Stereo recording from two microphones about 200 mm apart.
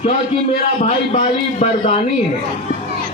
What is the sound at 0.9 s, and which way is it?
A man's voice, 35° left (ahead or behind).